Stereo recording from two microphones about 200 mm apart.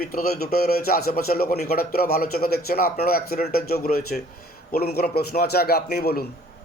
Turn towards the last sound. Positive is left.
turn(degrees=50)  # may be behind; listen again after turning